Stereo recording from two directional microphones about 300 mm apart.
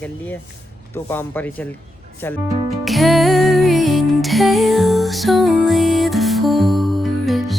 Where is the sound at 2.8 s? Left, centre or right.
Centre.